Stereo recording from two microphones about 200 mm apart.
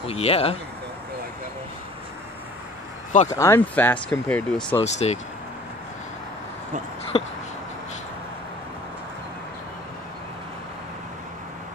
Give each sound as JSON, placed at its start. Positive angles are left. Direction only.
{"t": 0.0, "sound": "speech", "side_deg": 30}
{"t": 3.3, "sound": "speech", "side_deg": 15}
{"t": 4.7, "sound": "speech", "side_deg": 35}
{"t": 7.1, "sound": "speech", "side_deg": 30}